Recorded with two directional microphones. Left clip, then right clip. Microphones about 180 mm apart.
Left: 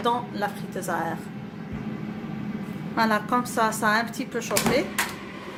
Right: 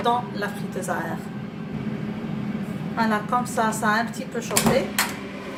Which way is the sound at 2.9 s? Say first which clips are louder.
Even; 45° left (ahead or behind).